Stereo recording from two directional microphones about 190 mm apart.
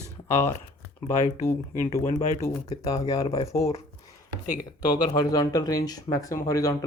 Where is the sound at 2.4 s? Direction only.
20° left (ahead or behind).